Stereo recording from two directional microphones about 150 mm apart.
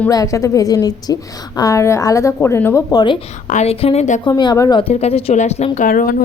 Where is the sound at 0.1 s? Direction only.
20° left (ahead or behind).